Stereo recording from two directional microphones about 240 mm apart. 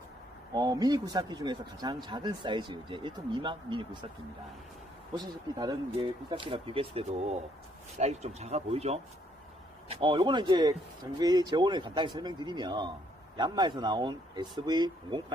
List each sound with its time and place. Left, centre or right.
0.5 s speech: centre
5.1 s speech: centre